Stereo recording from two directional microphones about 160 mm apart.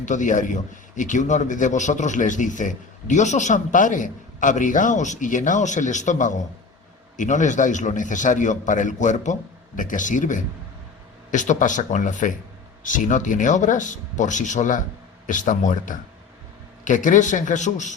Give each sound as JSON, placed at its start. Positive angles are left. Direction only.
{"t": 0.0, "sound": "a man's voice", "side_deg": 50}